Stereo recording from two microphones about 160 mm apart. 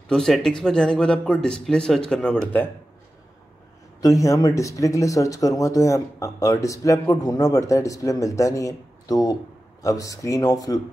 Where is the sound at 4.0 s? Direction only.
20° left (ahead or behind).